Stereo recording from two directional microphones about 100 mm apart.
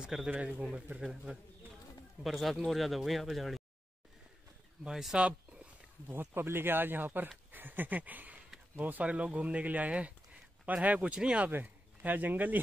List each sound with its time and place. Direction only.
0.0 s speech: 5° right (ahead or behind)
4.8 s speech: 5° right (ahead or behind)